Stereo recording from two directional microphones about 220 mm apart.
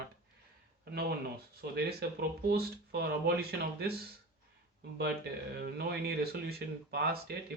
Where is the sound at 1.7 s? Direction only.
45° right (ahead or behind).